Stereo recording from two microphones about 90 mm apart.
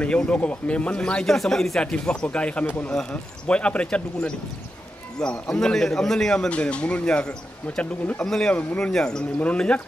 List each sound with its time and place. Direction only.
0.0 s a man's voice: 10° left (ahead or behind)